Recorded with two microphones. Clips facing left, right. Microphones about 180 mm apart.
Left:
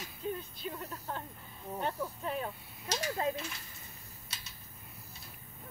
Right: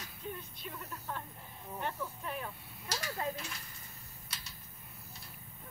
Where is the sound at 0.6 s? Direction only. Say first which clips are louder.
Left 5 dB; 35° left (ahead or behind).